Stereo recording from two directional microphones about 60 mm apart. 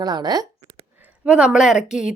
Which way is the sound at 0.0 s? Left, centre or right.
Right.